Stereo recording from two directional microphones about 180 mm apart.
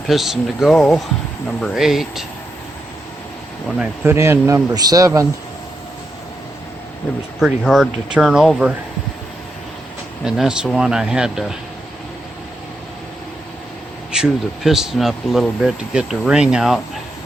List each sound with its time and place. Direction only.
0.1 s speech: centre (ahead or behind)
3.8 s speech: 15° right (ahead or behind)
7.3 s speech: centre (ahead or behind)
10.2 s speech: centre (ahead or behind)
14.1 s speech: 5° right (ahead or behind)